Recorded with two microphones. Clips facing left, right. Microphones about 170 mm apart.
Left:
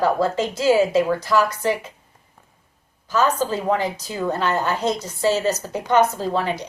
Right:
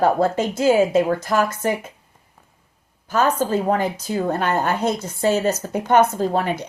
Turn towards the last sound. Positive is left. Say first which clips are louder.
# right 2 dB
turn(degrees=-50)  # may be behind; listen again after turning